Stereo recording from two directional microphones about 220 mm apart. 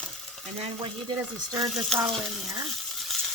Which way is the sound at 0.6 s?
25° right (ahead or behind).